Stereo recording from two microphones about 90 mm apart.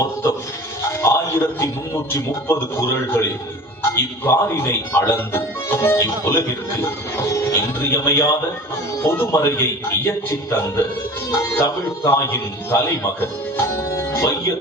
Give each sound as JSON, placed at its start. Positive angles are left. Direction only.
{"t": 1.0, "sound": "speech", "side_deg": 30}
{"t": 6.8, "sound": "music", "side_deg": 25}
{"t": 9.0, "sound": "speech", "side_deg": 25}
{"t": 13.6, "sound": "music", "side_deg": 30}